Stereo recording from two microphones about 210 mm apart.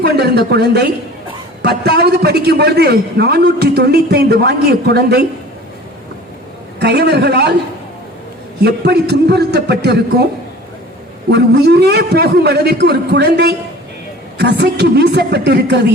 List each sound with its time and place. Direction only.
0.0 s a man's voice: 50° right (ahead or behind)
6.7 s a man's voice: 50° right (ahead or behind)
8.6 s a man's voice: 50° right (ahead or behind)
11.3 s a man's voice: 50° right (ahead or behind)